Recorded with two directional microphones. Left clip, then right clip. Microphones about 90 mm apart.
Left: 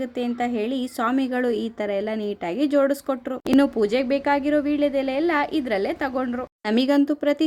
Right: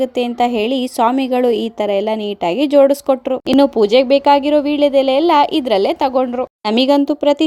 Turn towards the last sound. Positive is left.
turn(degrees=-40)  # may be behind; listen again after turning